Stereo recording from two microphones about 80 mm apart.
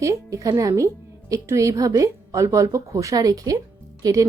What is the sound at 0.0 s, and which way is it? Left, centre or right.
Speech, right.